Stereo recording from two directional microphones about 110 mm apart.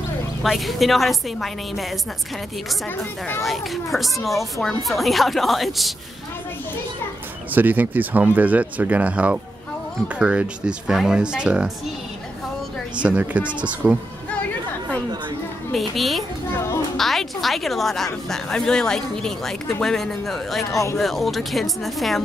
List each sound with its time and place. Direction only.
0.4 s a woman's voice: centre (ahead or behind)
3.0 s speech: 25° left (ahead or behind)
3.4 s a woman's voice: centre (ahead or behind)
7.5 s speech: 15° right (ahead or behind)
13.0 s speech: 15° right (ahead or behind)
14.3 s chatter: 15° left (ahead or behind)
15.7 s a woman's voice: centre (ahead or behind)
16.5 s children playing: 25° left (ahead or behind)
16.9 s a woman's voice: centre (ahead or behind)
20.7 s speech: 30° left (ahead or behind)
21.0 s a woman's voice: centre (ahead or behind)